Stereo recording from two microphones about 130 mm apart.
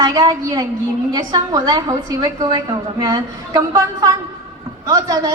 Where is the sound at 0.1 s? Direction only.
30° right (ahead or behind).